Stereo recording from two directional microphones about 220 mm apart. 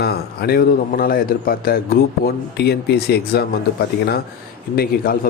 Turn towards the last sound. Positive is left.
turn(degrees=40)  # may be behind; listen again after turning